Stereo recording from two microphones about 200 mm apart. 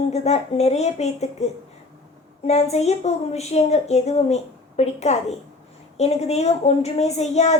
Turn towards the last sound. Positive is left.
turn(degrees=35)  # may be behind; listen again after turning